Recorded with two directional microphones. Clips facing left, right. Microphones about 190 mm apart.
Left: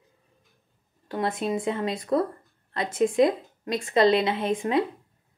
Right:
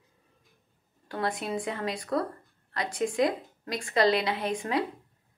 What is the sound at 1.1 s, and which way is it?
A woman's voice, 20° left (ahead or behind).